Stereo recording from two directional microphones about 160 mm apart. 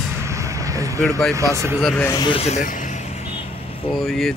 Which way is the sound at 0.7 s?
20° right (ahead or behind).